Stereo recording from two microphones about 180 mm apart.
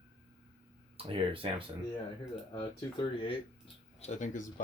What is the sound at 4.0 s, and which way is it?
Speech, 40° left (ahead or behind).